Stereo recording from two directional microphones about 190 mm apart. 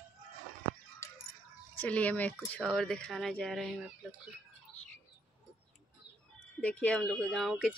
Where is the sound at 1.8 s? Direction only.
5° left (ahead or behind).